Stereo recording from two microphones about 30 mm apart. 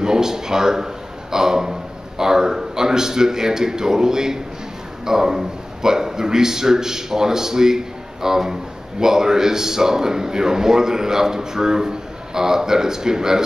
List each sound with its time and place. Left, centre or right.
0.0 s a man's voice: centre